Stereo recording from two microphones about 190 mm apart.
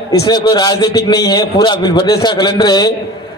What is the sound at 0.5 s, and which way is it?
A man's voice, 20° left (ahead or behind).